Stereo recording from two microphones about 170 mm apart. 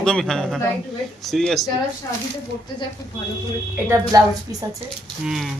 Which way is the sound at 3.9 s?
20° right (ahead or behind).